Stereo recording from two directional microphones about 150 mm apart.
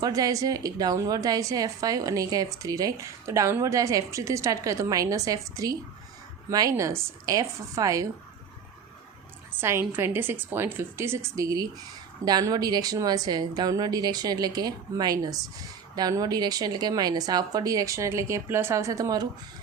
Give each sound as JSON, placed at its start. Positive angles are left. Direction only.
{"t": 0.0, "sound": "a woman's voice", "side_deg": -25}
{"t": 9.6, "sound": "a woman's voice", "side_deg": -15}